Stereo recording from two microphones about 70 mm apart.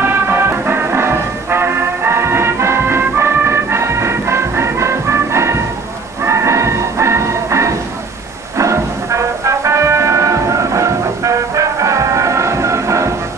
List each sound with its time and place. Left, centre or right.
0.0 s music: right